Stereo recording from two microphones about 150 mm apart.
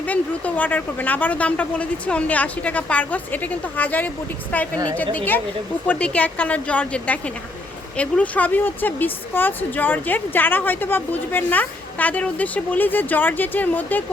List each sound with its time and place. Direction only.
0.0 s a woman's voice: 10° left (ahead or behind)